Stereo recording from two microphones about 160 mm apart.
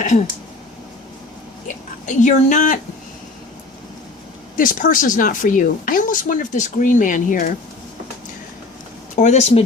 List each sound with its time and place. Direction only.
1.6 s a sound: 50° left (ahead or behind)
4.5 s speech: 55° left (ahead or behind)
9.1 s speech: 50° left (ahead or behind)